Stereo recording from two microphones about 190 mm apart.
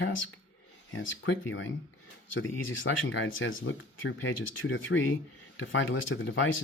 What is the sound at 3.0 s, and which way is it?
Speech, 80° left.